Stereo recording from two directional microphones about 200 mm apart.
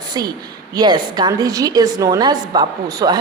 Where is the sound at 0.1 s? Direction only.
20° right (ahead or behind).